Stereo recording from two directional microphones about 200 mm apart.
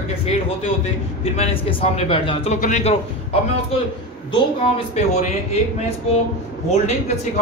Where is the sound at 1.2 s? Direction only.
30° left (ahead or behind).